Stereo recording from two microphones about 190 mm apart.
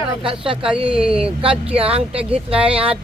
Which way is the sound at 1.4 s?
30° right (ahead or behind).